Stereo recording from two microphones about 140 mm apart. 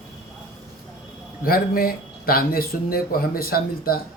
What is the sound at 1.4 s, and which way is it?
Speech, 90° left.